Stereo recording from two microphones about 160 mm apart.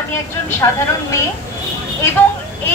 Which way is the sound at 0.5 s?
15° left (ahead or behind).